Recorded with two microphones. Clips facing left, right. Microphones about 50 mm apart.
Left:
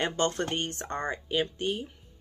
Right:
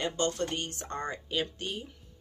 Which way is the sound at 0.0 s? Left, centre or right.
Left.